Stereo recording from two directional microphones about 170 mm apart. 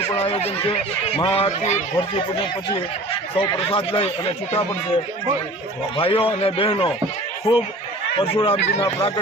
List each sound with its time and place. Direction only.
0.2 s speech: 35° left (ahead or behind)
3.4 s speech: 30° left (ahead or behind)
6.0 s speech: 35° left (ahead or behind)
7.5 s speech: 20° left (ahead or behind)
8.1 s speech: 35° left (ahead or behind)
8.8 s speech: 25° left (ahead or behind)